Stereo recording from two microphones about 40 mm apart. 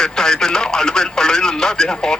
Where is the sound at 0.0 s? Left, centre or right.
Centre.